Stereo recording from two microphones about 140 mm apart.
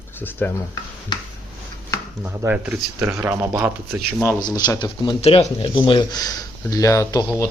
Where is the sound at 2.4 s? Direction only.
10° right (ahead or behind).